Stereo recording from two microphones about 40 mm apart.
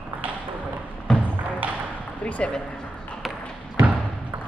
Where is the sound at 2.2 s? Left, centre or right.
Left.